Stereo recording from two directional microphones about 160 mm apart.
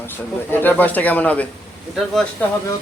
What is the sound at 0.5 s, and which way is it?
Speech, 10° left (ahead or behind).